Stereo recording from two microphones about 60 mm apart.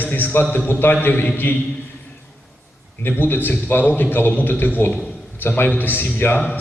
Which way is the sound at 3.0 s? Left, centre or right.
Left.